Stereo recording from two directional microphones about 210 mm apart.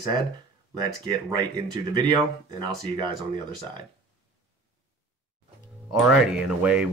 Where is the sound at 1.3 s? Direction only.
20° right (ahead or behind).